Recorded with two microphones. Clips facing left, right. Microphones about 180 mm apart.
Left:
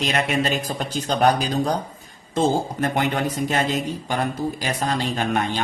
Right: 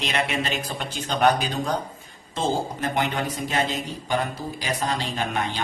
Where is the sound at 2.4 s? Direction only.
45° left (ahead or behind).